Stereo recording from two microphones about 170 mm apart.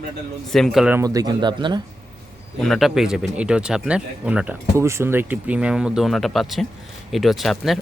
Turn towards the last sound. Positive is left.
turn(degrees=0)  # may be behind; listen again after turning